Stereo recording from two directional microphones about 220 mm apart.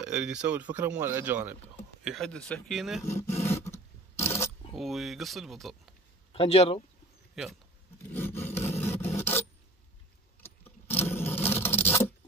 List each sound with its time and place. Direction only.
0.0 s speech: 5° right (ahead or behind)
3.1 s speech: 10° left (ahead or behind)
3.4 s a sound: 10° left (ahead or behind)
4.7 s speech: centre (ahead or behind)
6.3 s speech: 25° left (ahead or behind)
7.4 s speech: centre (ahead or behind)
8.1 s rub: 10° left (ahead or behind)
10.4 s scrape: 10° left (ahead or behind)